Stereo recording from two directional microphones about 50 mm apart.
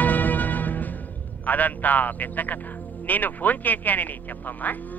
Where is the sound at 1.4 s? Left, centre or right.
Left.